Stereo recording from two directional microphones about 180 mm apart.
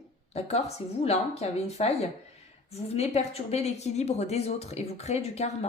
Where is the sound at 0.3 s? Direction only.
35° left (ahead or behind).